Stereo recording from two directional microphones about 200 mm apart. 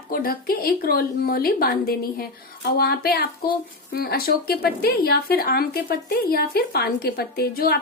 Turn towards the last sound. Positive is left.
turn(degrees=50)  # may be behind; listen again after turning